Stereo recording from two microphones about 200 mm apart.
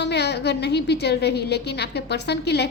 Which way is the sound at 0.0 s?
55° left (ahead or behind).